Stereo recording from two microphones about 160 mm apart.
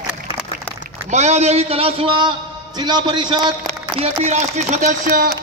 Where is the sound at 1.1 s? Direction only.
45° right (ahead or behind); by 3.7 s 25° right (ahead or behind).